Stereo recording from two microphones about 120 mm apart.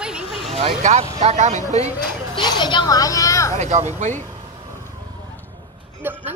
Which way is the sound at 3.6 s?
70° right (ahead or behind).